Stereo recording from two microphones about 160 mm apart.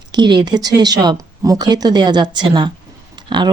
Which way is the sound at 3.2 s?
30° right (ahead or behind).